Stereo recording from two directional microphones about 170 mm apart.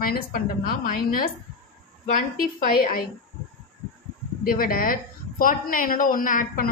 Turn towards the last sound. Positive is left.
turn(degrees=50)  # may be behind; listen again after turning